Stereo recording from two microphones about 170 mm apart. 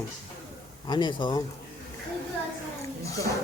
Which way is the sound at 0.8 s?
25° left (ahead or behind).